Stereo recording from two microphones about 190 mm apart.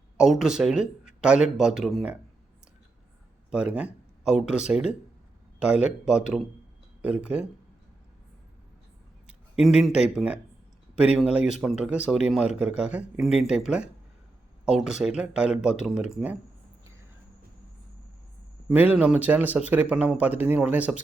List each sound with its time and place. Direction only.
0.2 s speech: 5° right (ahead or behind)
3.5 s speech: 5° right (ahead or behind)
9.2 s speech: 5° right (ahead or behind)
18.7 s speech: 10° right (ahead or behind)